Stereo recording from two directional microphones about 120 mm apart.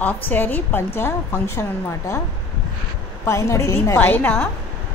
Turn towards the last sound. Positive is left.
turn(degrees=15)  # may be behind; listen again after turning